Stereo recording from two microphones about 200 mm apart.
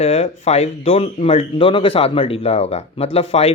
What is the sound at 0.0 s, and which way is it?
Speech, 30° left (ahead or behind).